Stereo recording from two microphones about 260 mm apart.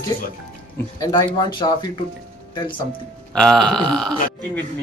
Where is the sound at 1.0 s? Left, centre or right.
Centre.